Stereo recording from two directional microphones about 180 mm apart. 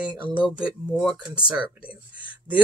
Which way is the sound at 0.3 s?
5° right (ahead or behind).